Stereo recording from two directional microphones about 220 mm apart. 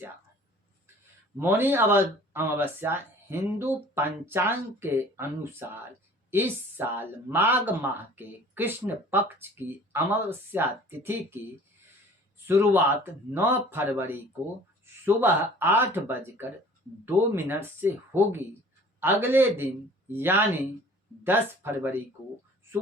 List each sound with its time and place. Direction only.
1.4 s speech: 10° right (ahead or behind)
12.5 s speech: 10° right (ahead or behind)